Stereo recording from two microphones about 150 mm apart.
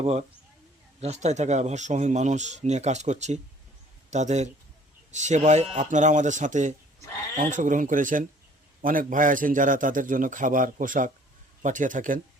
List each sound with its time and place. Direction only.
0.0 s a man's voice: 45° right (ahead or behind)